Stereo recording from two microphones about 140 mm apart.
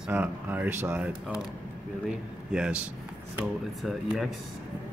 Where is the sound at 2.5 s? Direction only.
5° right (ahead or behind).